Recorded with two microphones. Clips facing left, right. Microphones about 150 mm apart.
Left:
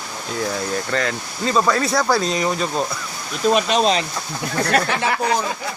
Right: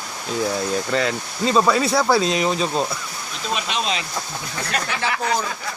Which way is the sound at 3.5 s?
40° left (ahead or behind).